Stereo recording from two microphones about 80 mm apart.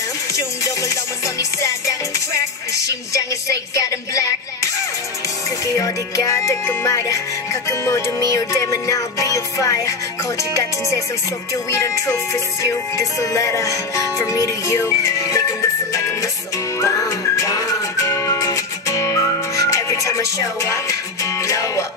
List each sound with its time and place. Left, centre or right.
0.3 s music: left
5.8 s music: left